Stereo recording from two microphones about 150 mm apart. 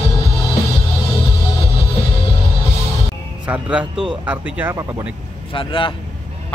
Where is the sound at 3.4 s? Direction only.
10° right (ahead or behind).